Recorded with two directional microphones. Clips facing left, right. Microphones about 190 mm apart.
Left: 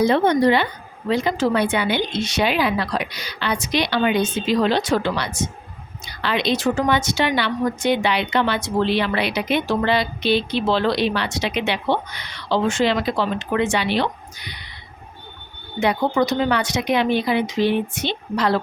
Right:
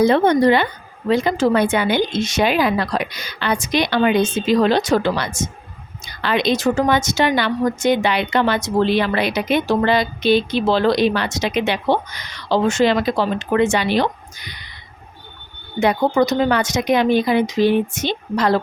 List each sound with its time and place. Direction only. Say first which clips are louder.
0.0 s a woman's voice: right 3 dB; 50° right (ahead or behind)
15.8 s a woman's voice: right 3 dB; 45° right (ahead or behind)